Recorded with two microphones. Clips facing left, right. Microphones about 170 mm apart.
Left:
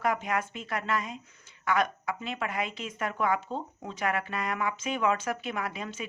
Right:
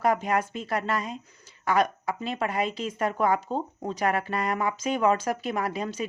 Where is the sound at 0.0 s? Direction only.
35° right (ahead or behind).